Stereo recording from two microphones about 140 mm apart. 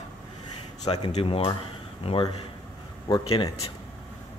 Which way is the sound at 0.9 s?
40° left (ahead or behind).